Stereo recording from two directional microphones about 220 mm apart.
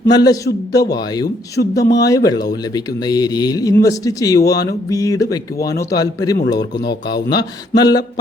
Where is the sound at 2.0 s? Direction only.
15° left (ahead or behind).